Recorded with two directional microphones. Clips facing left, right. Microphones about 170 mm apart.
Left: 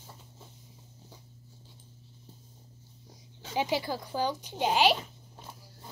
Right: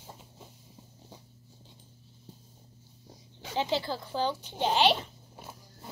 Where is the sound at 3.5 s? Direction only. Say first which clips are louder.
Even; 15° left (ahead or behind).